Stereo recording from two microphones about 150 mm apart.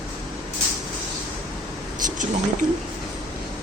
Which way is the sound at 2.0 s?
60° right (ahead or behind).